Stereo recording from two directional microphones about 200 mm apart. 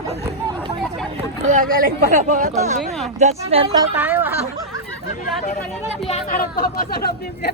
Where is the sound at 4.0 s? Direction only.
10° right (ahead or behind).